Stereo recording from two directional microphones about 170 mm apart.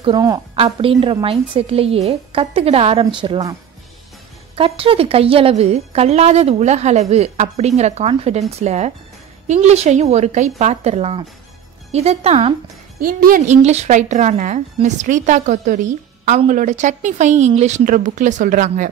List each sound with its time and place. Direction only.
0.0 s a woman's voice: 25° right (ahead or behind)
0.6 s a woman's voice: 35° right (ahead or behind)
4.6 s a woman's voice: 35° right (ahead or behind)
13.0 s speech: 55° right (ahead or behind)